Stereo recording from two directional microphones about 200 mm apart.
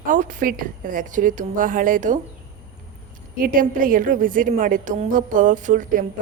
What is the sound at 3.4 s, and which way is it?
A woman's voice, 45° right (ahead or behind).